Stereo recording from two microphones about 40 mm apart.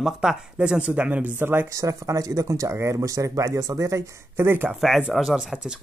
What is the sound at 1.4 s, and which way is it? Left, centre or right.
Speech, right.